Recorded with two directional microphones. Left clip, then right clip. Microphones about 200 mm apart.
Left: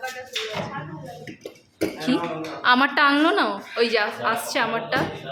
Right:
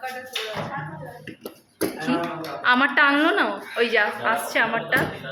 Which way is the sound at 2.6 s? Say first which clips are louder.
Even; 20° left (ahead or behind).